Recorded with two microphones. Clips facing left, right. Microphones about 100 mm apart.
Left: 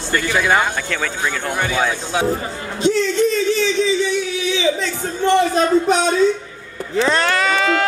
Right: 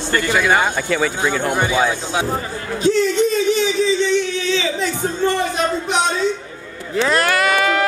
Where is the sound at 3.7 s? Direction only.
Centre (ahead or behind).